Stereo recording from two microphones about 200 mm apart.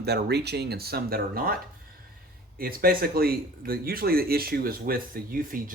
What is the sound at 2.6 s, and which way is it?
Speech, 45° right (ahead or behind).